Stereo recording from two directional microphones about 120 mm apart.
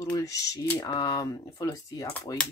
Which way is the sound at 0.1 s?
30° left (ahead or behind).